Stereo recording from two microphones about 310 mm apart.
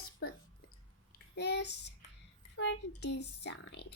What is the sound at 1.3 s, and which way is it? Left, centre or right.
A child's voice, left.